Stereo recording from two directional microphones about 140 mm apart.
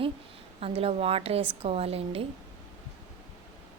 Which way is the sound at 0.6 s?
45° right (ahead or behind).